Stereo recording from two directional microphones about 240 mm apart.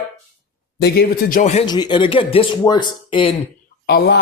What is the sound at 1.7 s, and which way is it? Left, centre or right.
Speech, centre.